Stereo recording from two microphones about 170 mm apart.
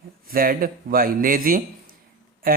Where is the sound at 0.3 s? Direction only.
60° right (ahead or behind).